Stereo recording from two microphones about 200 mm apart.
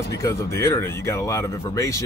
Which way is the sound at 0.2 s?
15° left (ahead or behind).